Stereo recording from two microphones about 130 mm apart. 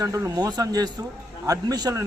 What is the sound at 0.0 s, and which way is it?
A man's voice, 25° right (ahead or behind).